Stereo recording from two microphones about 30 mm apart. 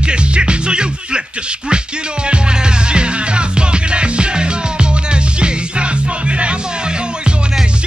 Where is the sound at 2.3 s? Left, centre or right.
Right.